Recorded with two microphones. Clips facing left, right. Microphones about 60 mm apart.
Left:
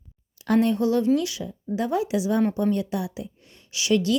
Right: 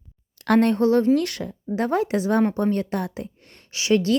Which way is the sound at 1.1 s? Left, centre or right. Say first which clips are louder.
Right 2 dB; right.